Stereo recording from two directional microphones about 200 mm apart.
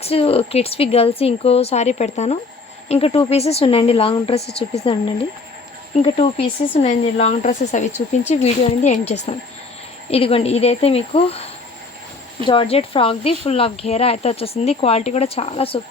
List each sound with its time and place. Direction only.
0.0 s speech: 30° left (ahead or behind)
12.5 s speech: 25° left (ahead or behind)